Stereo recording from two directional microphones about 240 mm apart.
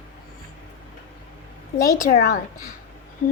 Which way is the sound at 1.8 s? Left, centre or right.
Left.